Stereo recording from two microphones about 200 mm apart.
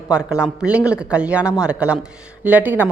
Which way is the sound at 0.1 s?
5° right (ahead or behind).